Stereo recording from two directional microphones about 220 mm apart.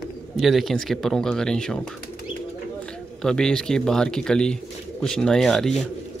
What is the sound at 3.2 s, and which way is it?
Speech, 5° left (ahead or behind).